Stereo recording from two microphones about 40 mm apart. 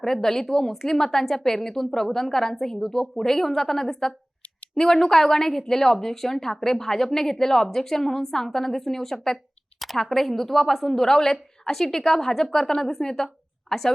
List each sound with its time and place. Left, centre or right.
0.0 s a woman's voice: centre